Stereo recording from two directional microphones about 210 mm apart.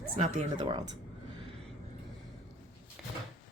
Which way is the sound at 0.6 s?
20° right (ahead or behind).